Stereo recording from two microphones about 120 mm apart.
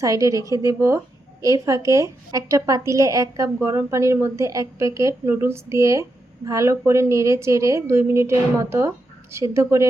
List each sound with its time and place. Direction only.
0.0 s a woman's voice: 25° right (ahead or behind)